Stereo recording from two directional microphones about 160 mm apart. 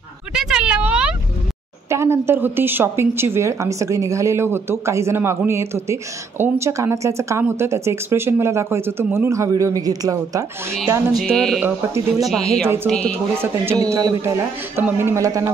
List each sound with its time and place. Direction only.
0.3 s a sound: 5° right (ahead or behind)
1.9 s a woman's voice: 15° right (ahead or behind)
11.1 s music: centre (ahead or behind)
11.6 s a woman's voice: 20° right (ahead or behind)
12.8 s speech: 5° left (ahead or behind)
13.4 s a man's voice: 15° right (ahead or behind)